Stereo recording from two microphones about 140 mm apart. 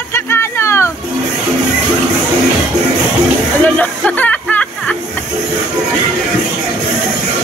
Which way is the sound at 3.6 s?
10° left (ahead or behind).